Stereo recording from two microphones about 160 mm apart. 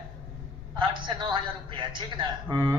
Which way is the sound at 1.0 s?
30° right (ahead or behind).